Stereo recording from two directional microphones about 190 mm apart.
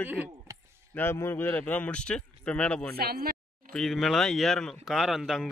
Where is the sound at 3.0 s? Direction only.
55° right (ahead or behind).